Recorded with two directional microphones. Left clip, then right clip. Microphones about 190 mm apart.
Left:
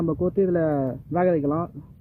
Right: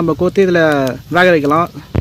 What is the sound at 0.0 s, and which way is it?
Speech, 20° right (ahead or behind).